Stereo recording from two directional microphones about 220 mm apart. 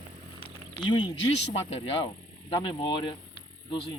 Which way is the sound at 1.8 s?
25° left (ahead or behind).